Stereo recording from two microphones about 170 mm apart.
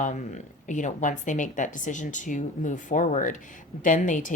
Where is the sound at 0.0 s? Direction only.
45° left (ahead or behind).